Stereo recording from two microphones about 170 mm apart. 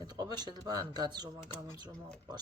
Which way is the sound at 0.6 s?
25° right (ahead or behind).